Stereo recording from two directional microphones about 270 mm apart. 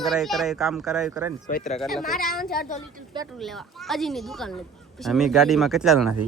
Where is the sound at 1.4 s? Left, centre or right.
Left.